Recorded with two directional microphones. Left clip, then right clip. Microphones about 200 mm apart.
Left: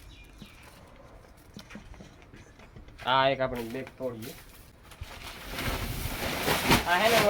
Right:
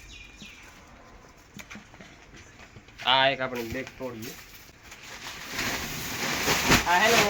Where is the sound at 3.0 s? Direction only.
50° left (ahead or behind).